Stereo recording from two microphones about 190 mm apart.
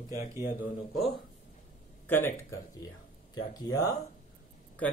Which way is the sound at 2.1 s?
10° left (ahead or behind).